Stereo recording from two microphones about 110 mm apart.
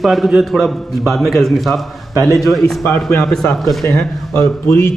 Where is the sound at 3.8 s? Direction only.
25° left (ahead or behind).